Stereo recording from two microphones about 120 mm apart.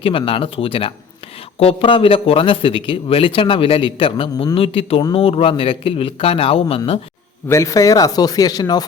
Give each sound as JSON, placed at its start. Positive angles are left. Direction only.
{"t": 0.0, "sound": "speech", "side_deg": 50}
{"t": 7.4, "sound": "speech", "side_deg": 25}